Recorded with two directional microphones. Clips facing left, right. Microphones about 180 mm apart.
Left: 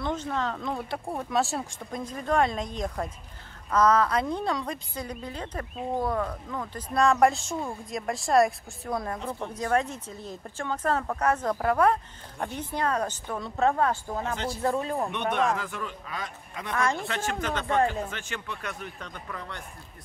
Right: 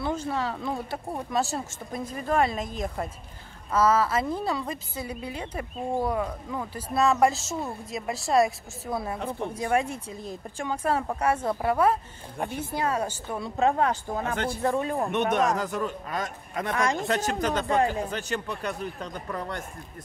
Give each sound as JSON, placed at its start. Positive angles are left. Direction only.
{"t": 0.0, "sound": "speech", "side_deg": -10}
{"t": 14.2, "sound": "a man's voice", "side_deg": -55}
{"t": 16.7, "sound": "speech", "side_deg": -15}
{"t": 17.0, "sound": "speech", "side_deg": -40}